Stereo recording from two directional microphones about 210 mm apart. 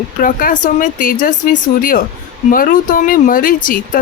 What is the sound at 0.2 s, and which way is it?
Speech, 40° left (ahead or behind).